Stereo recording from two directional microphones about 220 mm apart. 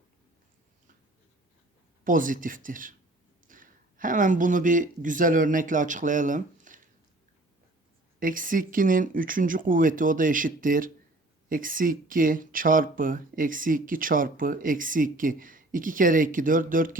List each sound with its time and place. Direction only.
2.0 s speech: 35° right (ahead or behind)
8.2 s speech: 40° right (ahead or behind)